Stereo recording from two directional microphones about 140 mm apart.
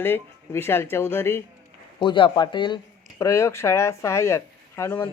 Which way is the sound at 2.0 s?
35° left (ahead or behind).